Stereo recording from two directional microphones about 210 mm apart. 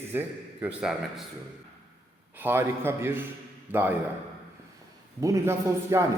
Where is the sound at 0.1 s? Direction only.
10° right (ahead or behind).